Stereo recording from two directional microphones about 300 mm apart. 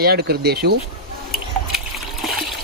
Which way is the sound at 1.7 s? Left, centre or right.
Centre.